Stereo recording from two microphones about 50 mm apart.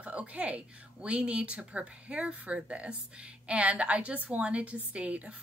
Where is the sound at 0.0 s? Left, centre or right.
Right.